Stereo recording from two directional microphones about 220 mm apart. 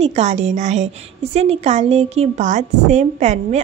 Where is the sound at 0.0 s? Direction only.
30° right (ahead or behind).